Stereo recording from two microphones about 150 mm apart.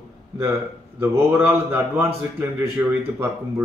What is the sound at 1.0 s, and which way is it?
A man's voice, 15° right (ahead or behind).